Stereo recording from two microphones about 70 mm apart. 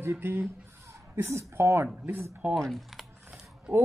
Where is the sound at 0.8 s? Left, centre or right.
Right.